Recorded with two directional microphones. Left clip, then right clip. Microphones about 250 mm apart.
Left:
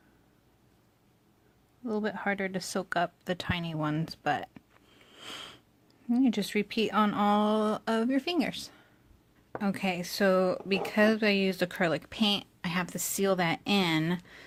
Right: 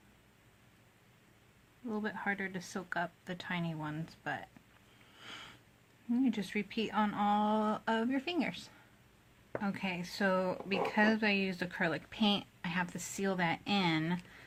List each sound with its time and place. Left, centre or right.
1.9 s speech: left
5.2 s sniff: left
6.1 s speech: left